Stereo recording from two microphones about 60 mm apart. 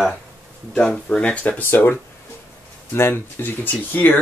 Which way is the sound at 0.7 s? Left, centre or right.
Centre.